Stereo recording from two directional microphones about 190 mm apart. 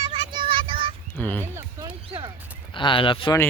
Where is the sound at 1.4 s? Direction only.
15° right (ahead or behind).